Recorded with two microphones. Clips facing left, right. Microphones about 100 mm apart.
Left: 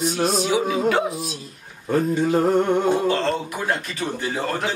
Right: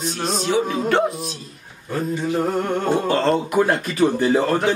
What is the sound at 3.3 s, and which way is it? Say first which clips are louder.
A man's voice: right 7 dB; 45° right (ahead or behind).